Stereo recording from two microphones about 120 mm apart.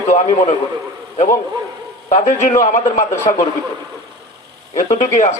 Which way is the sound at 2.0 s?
75° left (ahead or behind).